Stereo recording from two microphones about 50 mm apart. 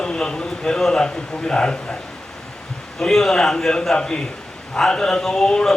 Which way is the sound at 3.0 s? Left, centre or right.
Centre.